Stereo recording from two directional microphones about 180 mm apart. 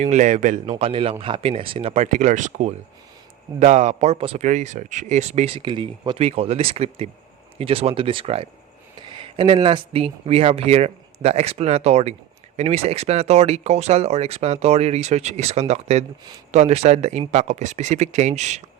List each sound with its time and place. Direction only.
0.0 s speech: 40° right (ahead or behind)
0.8 s speech: 30° right (ahead or behind)